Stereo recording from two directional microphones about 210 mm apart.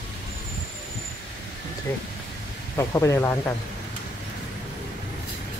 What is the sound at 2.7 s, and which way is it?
Speech, 15° left (ahead or behind).